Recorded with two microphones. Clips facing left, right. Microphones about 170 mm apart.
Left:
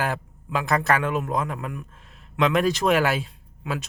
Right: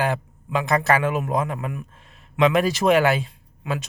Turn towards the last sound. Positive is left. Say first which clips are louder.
# right 2 dB
turn(degrees=0)  # may be behind; listen again after turning